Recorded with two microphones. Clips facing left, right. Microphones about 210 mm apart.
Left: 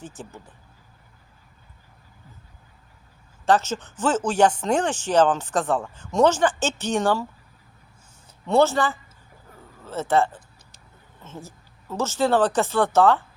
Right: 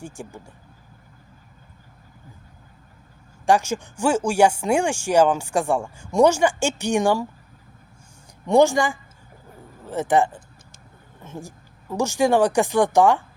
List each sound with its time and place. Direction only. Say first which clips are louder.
0.0 s speech: right 3 dB; 10° right (ahead or behind)
3.4 s speech: right 1 dB; 10° right (ahead or behind)
8.4 s speech: right 3 dB; 15° right (ahead or behind)